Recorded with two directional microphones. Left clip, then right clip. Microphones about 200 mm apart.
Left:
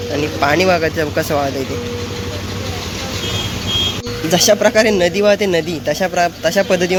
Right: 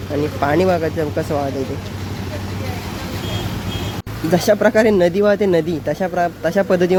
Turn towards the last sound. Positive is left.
turn(degrees=-15)  # may be behind; listen again after turning